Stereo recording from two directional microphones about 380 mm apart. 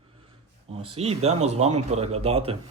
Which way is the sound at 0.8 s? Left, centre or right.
Centre.